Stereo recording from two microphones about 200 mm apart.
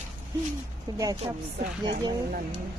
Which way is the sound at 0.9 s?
20° right (ahead or behind).